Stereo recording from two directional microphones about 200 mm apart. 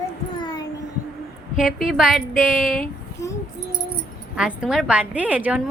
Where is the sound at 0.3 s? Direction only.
20° left (ahead or behind).